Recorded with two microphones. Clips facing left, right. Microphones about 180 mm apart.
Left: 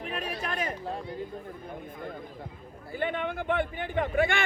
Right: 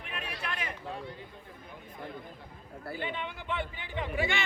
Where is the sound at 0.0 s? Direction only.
40° left (ahead or behind).